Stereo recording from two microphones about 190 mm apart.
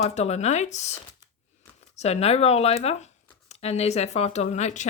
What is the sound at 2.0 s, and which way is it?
A woman's voice, 35° left (ahead or behind).